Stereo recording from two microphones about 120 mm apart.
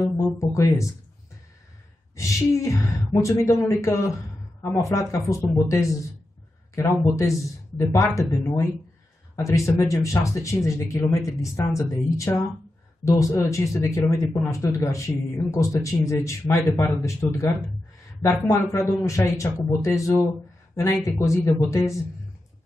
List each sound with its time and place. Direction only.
0.2 s speech: 25° left (ahead or behind)
2.1 s a man's voice: 25° left (ahead or behind)